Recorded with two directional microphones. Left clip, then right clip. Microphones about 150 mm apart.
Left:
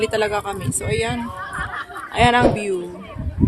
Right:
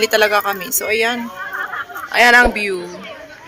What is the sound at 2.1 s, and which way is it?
Speech, 5° right (ahead or behind).